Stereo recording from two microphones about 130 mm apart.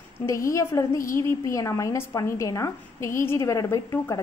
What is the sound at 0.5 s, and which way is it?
A woman's voice, 25° left (ahead or behind).